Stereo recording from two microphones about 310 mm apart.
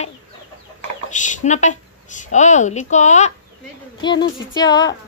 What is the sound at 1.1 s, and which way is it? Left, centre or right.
A woman's voice, left.